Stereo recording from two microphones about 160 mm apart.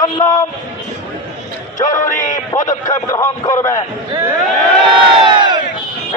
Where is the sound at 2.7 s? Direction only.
20° left (ahead or behind).